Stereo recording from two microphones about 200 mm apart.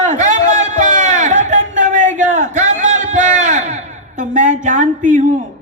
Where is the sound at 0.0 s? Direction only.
40° right (ahead or behind).